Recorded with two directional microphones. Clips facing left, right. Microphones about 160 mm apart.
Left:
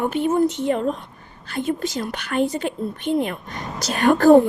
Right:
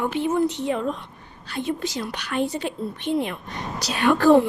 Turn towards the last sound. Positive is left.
turn(degrees=45)  # may be behind; listen again after turning